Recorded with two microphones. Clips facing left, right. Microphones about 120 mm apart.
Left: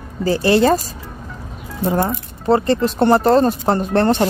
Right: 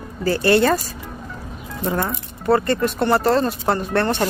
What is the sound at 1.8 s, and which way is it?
Speech, 20° left (ahead or behind).